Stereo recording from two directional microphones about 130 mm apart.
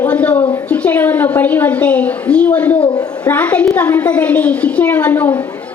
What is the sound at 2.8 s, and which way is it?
Speech, 35° left (ahead or behind).